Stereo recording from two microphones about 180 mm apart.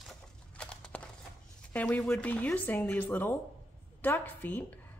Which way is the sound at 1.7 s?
10° left (ahead or behind).